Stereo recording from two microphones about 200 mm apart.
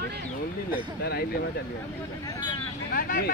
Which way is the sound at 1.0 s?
50° left (ahead or behind).